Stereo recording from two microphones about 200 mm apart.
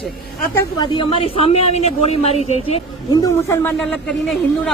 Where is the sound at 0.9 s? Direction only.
30° left (ahead or behind).